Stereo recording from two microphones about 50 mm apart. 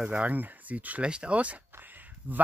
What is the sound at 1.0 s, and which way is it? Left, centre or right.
Speech, right.